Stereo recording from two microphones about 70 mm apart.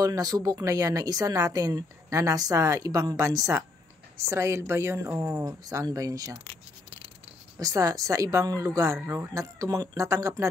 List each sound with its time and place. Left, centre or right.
0.0 s speech: right
5.4 s speech: right
7.5 s speech: right